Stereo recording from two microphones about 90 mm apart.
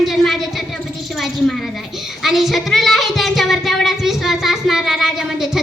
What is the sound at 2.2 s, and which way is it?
Child singing, centre (ahead or behind).